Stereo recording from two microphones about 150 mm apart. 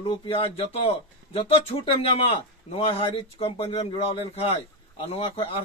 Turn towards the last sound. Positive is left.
turn(degrees=40)  # may be behind; listen again after turning